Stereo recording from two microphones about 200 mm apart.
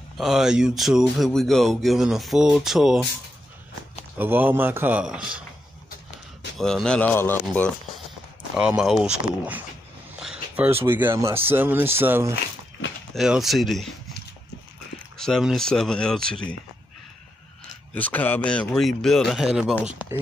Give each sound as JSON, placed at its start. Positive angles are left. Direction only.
{"t": 0.2, "sound": "speech", "side_deg": 0}
{"t": 4.2, "sound": "speech", "side_deg": -10}
{"t": 6.6, "sound": "speech", "side_deg": 5}
{"t": 8.5, "sound": "speech", "side_deg": -5}
{"t": 13.1, "sound": "speech", "side_deg": 0}
{"t": 15.1, "sound": "speech", "side_deg": 0}
{"t": 17.9, "sound": "speech", "side_deg": 10}